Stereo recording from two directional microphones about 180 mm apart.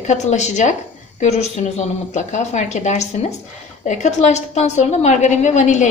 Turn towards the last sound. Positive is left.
turn(degrees=40)  # may be behind; listen again after turning